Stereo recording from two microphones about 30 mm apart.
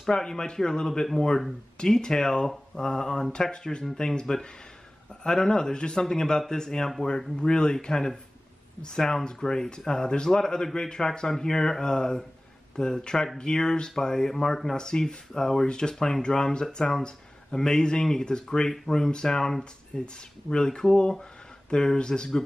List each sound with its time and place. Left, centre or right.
0.1 s speech: left
7.3 s speech: left
14.8 s speech: left